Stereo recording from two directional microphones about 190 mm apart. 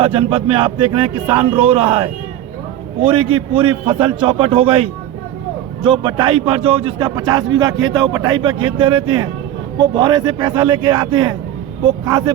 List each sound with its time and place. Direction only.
0.0 s a man's voice: 30° right (ahead or behind)